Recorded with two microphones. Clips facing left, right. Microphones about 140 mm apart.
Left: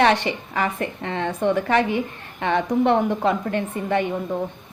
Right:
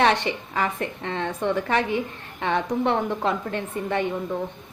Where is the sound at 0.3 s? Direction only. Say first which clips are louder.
Left 2 dB; 10° left (ahead or behind).